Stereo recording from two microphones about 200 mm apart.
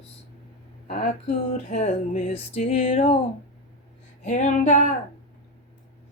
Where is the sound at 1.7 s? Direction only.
35° left (ahead or behind).